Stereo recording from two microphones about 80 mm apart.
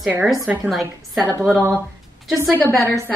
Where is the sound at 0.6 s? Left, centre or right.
Centre.